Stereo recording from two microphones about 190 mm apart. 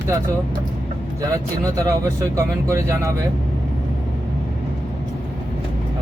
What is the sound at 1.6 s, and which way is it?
Speech, 15° right (ahead or behind).